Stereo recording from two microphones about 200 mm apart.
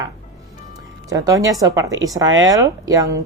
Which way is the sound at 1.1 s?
15° right (ahead or behind).